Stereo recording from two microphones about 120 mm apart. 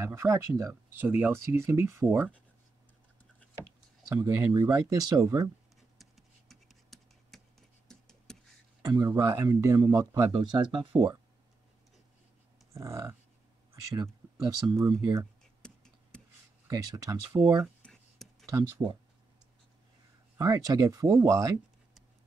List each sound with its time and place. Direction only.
0.0 s speech: 25° right (ahead or behind)
4.1 s speech: 25° right (ahead or behind)
5.8 s writing: centre (ahead or behind)
7.9 s a sound: 5° left (ahead or behind)
8.8 s speech: 25° right (ahead or behind)
10.3 s speech: 35° right (ahead or behind)
12.7 s speech: 25° right (ahead or behind)
15.6 s a sound: 5° left (ahead or behind)
16.6 s speech: 30° right (ahead or behind)
17.8 s a sound: centre (ahead or behind)
18.6 s speech: 40° right (ahead or behind)
20.3 s speech: 30° right (ahead or behind)